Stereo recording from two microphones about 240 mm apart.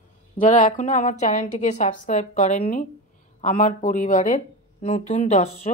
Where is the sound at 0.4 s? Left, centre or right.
Left.